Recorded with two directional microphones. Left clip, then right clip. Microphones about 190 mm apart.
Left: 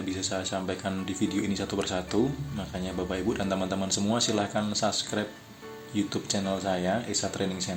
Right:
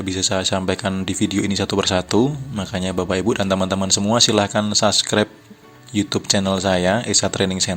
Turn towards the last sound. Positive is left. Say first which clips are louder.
# right 11 dB
turn(degrees=-45)  # may be behind; listen again after turning